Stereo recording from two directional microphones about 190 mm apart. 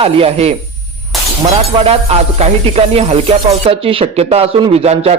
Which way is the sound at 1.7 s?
30° right (ahead or behind).